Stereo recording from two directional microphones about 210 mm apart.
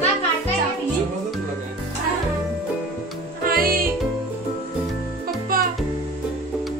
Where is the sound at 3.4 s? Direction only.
45° right (ahead or behind).